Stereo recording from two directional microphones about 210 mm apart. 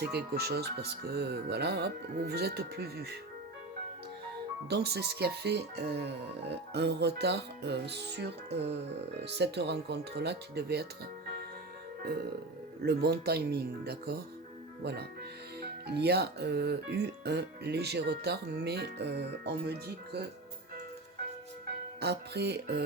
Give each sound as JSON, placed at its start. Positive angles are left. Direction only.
{"t": 0.0, "sound": "speech", "side_deg": -50}
{"t": 4.7, "sound": "speech", "side_deg": -50}
{"t": 12.8, "sound": "speech", "side_deg": -50}
{"t": 15.6, "sound": "speech", "side_deg": -50}
{"t": 22.0, "sound": "speech", "side_deg": -50}